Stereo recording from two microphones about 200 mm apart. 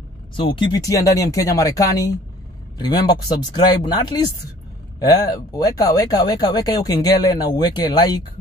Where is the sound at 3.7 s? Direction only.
20° left (ahead or behind).